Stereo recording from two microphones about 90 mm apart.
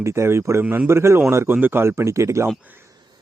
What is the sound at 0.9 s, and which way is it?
Speech, 30° right (ahead or behind).